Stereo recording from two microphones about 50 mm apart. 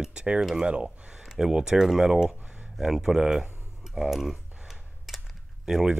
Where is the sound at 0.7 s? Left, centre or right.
Right.